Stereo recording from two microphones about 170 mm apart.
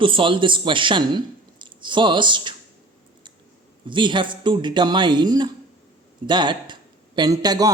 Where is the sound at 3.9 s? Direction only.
30° right (ahead or behind).